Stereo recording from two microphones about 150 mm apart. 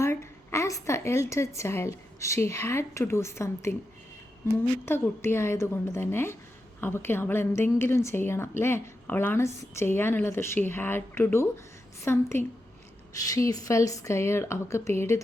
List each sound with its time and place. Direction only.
0.0 s a woman's voice: 20° left (ahead or behind)